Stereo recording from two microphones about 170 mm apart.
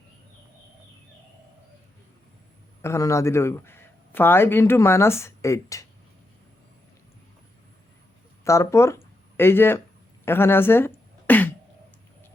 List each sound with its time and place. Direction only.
2.8 s speech: 15° left (ahead or behind)
8.4 s speech: 15° left (ahead or behind)
10.2 s a sound: 15° left (ahead or behind)